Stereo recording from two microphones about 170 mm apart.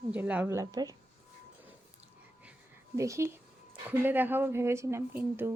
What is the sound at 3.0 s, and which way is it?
Speech, 15° right (ahead or behind).